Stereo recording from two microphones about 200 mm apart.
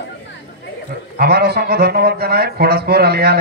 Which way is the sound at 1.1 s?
55° right (ahead or behind).